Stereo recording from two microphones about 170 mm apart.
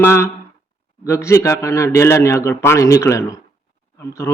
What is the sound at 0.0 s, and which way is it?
Speech, 15° left (ahead or behind).